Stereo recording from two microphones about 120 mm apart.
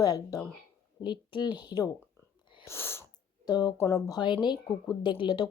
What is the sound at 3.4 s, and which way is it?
Speech, 35° left (ahead or behind).